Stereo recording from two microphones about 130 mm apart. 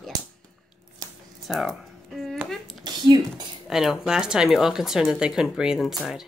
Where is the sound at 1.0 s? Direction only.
30° right (ahead or behind).